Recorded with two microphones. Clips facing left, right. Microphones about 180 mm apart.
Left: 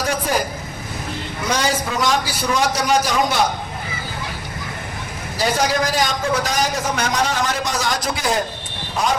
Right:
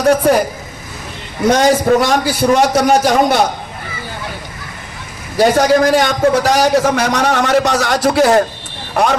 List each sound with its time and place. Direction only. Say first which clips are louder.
0.0 s a man's voice: right 11 dB; 60° right (ahead or behind)
1.5 s a man's voice: right 11 dB; 50° right (ahead or behind)
5.4 s a man's voice: right 9 dB; 55° right (ahead or behind)